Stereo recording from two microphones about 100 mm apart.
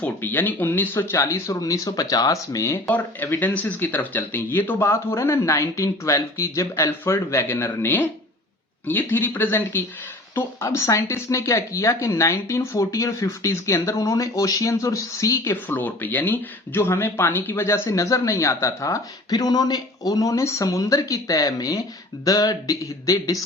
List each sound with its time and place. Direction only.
0.0 s speech: 20° left (ahead or behind)
2.8 s speech: 15° left (ahead or behind); by 15.5 s 30° left (ahead or behind)
15.7 s speech: 20° left (ahead or behind); by 23.4 s 35° left (ahead or behind)